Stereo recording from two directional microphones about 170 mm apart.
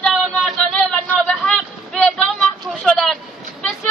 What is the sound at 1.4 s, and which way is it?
Vehicle, 5° left (ahead or behind).